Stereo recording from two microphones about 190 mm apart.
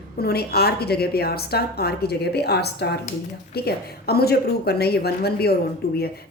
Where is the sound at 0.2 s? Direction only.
55° left (ahead or behind).